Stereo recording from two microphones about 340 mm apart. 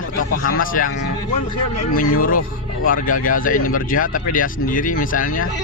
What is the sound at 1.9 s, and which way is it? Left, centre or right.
Speech, left.